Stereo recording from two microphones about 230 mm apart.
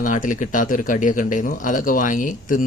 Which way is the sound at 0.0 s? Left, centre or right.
Left.